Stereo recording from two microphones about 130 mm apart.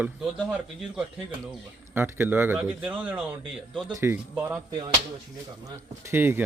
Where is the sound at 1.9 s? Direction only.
15° right (ahead or behind).